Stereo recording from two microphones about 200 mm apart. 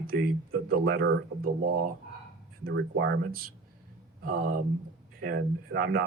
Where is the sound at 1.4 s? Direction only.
45° right (ahead or behind).